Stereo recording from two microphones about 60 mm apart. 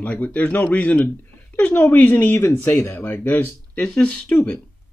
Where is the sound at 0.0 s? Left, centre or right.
Left.